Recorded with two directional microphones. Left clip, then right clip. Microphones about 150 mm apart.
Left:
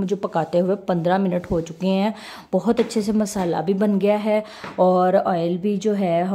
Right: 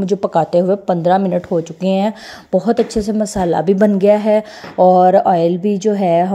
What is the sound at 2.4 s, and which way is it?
Speech, 10° right (ahead or behind).